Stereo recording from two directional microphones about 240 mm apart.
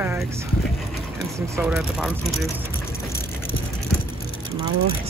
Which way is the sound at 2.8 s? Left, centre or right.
Centre.